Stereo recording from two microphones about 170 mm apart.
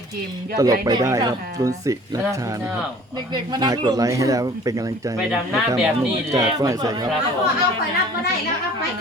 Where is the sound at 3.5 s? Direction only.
25° right (ahead or behind).